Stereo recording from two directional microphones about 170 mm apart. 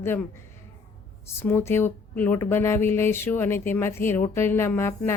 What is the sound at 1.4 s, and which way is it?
Speech, 15° left (ahead or behind).